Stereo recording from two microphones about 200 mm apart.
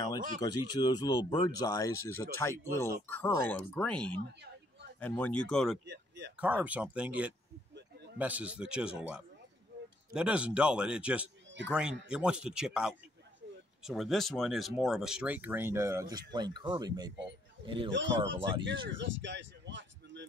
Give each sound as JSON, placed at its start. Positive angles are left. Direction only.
{"t": 0.4, "sound": "speech", "side_deg": 20}
{"t": 5.9, "sound": "speech", "side_deg": -60}
{"t": 6.3, "sound": "a man's voice", "side_deg": -5}
{"t": 17.9, "sound": "speech", "side_deg": -65}
{"t": 18.9, "sound": "a sound", "side_deg": -65}